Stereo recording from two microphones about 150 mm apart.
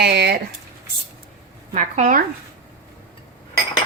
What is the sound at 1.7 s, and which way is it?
Speech, 55° right (ahead or behind).